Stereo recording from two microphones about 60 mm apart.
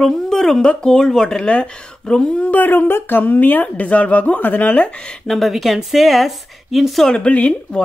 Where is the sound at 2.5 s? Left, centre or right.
Left.